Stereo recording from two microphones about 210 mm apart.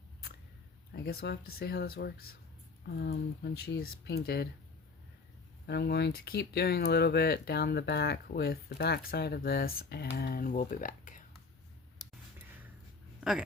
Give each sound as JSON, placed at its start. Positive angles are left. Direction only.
{"t": 0.9, "sound": "speech", "side_deg": 45}
{"t": 5.6, "sound": "speech", "side_deg": 50}